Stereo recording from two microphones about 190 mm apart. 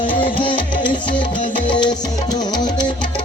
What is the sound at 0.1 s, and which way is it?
Music, 25° left (ahead or behind).